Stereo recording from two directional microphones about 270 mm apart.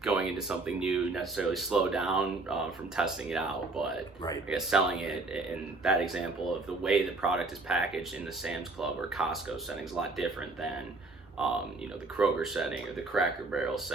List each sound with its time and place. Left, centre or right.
0.0 s speech: centre